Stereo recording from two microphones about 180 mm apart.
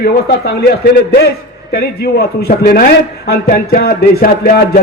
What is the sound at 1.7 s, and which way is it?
Speech, 60° left (ahead or behind).